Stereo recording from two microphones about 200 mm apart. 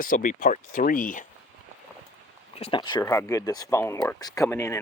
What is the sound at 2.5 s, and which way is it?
Speech, 25° left (ahead or behind).